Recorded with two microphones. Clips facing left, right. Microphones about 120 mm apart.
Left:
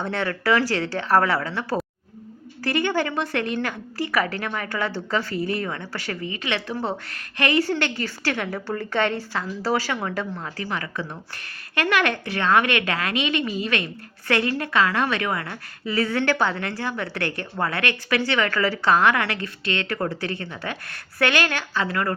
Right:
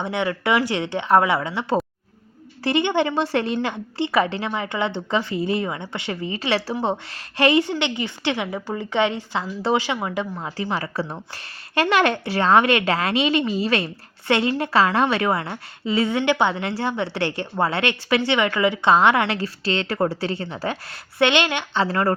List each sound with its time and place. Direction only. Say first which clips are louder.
0.0 s a woman's voice: right 2 dB; 15° right (ahead or behind)
21.8 s a woman's voice: right 4 dB; 30° right (ahead or behind)